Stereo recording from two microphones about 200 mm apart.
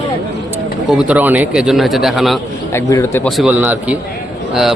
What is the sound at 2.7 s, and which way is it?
Speech, 15° left (ahead or behind).